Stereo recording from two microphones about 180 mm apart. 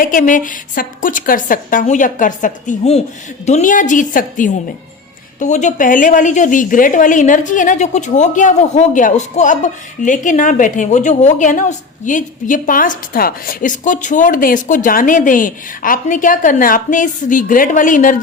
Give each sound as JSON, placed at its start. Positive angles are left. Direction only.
{"t": 0.0, "sound": "a woman's voice", "side_deg": 50}